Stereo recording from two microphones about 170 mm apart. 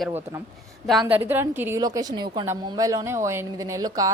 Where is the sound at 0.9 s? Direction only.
5° right (ahead or behind).